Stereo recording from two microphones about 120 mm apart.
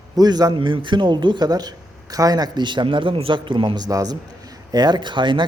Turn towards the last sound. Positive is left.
turn(degrees=-40)  # may be behind; listen again after turning